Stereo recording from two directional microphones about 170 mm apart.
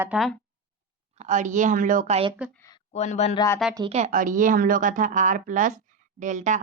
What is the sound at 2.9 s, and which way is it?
Speech, 40° left (ahead or behind).